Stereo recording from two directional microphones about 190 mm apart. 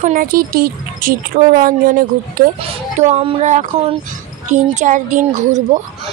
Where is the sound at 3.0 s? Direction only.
35° right (ahead or behind).